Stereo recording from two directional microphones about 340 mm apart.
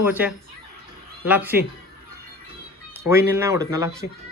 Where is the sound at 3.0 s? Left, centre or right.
Centre.